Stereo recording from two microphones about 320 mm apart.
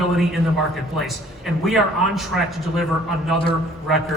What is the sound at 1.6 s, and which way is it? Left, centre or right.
A man's voice, centre.